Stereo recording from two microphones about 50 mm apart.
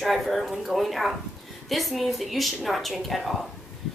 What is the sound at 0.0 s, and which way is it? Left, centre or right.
A woman's voice, centre.